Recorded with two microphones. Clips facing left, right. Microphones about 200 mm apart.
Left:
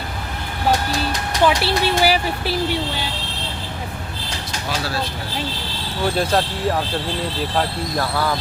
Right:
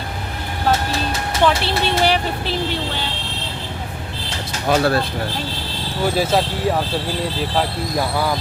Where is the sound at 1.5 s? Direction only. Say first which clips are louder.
Left 1 dB; 5° left (ahead or behind).